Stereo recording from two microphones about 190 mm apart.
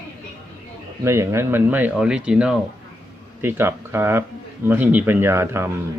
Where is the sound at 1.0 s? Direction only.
15° right (ahead or behind).